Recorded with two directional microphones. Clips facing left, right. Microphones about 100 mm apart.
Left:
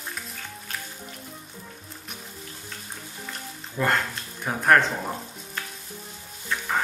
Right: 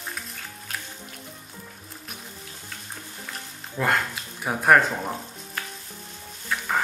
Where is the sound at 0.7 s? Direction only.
5° right (ahead or behind).